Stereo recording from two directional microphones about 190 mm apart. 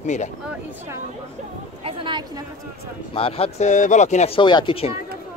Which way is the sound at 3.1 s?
30° left (ahead or behind).